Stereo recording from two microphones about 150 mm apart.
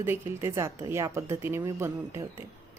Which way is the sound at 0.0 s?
15° right (ahead or behind).